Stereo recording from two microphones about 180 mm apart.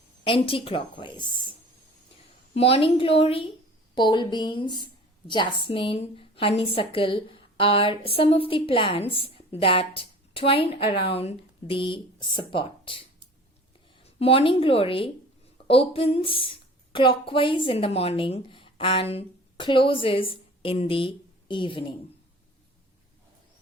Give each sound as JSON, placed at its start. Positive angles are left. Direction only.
{"t": 0.3, "sound": "speech", "side_deg": 30}
{"t": 2.6, "sound": "a woman's voice", "side_deg": 35}
{"t": 14.0, "sound": "a woman's voice", "side_deg": 30}